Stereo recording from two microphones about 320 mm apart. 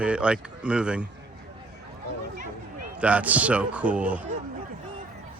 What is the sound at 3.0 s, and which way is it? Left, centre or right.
Speech, centre.